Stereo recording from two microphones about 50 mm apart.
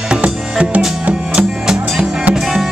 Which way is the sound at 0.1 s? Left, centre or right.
Right.